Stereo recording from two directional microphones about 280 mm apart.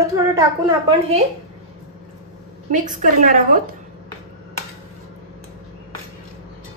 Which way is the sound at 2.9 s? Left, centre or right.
Right.